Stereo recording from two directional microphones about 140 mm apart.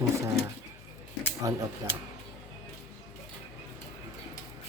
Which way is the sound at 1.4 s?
25° right (ahead or behind).